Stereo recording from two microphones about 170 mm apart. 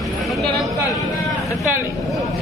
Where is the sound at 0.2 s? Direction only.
Centre (ahead or behind).